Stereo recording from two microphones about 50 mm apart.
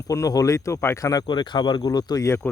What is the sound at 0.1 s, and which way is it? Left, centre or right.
Speech, left.